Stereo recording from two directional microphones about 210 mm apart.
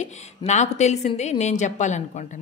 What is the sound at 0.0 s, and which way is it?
A woman's voice, 35° left (ahead or behind).